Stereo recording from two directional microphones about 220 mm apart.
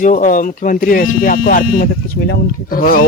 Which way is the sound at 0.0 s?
35° left (ahead or behind).